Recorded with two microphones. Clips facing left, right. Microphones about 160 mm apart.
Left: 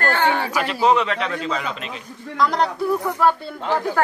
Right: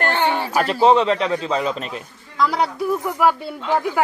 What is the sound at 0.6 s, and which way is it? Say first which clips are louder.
A man's voice: right 5 dB; 35° right (ahead or behind).